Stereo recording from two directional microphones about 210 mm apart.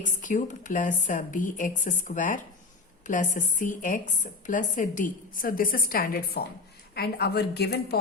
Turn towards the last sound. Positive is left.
turn(degrees=50)  # may be behind; listen again after turning